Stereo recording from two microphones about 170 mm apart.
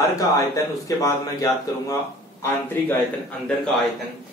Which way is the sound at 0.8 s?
20° left (ahead or behind).